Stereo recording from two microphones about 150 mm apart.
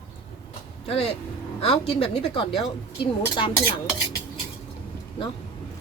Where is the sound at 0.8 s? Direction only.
40° left (ahead or behind).